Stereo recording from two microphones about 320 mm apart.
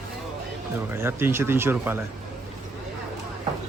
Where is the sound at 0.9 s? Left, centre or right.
Centre.